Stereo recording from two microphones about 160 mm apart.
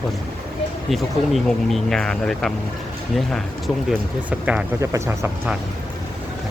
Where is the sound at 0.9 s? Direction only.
Centre (ahead or behind).